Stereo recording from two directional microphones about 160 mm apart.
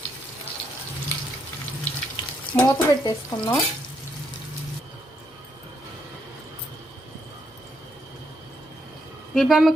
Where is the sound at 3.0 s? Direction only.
25° left (ahead or behind).